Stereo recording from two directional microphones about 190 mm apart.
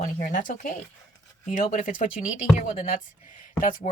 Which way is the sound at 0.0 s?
45° left (ahead or behind).